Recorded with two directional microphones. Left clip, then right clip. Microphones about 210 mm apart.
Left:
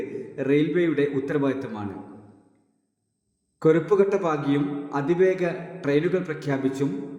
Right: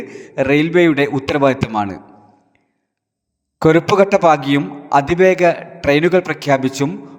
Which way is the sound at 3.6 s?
40° right (ahead or behind).